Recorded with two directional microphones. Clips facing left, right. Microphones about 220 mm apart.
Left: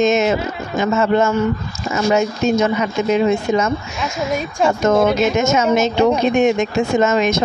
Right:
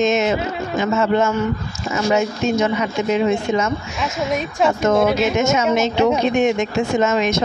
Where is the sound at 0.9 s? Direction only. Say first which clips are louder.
Left 2 dB; 45° left (ahead or behind).